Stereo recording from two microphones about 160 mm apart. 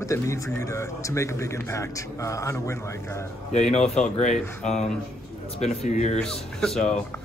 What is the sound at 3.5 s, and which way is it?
Speech, 40° left (ahead or behind).